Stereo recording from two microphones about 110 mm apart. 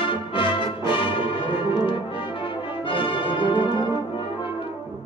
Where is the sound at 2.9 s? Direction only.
50° left (ahead or behind).